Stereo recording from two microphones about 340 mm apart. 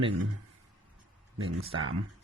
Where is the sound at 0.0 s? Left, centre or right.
Right.